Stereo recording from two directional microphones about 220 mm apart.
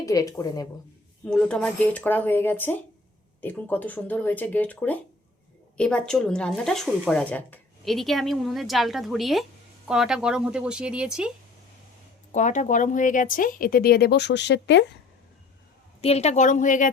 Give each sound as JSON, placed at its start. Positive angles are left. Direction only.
{"t": 0.0, "sound": "speech", "side_deg": 15}
{"t": 1.2, "sound": "speech", "side_deg": 5}
{"t": 12.3, "sound": "speech", "side_deg": 35}
{"t": 16.0, "sound": "speech", "side_deg": 30}